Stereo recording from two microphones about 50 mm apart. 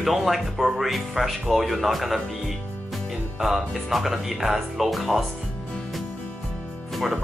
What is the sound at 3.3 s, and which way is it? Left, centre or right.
Speech, centre.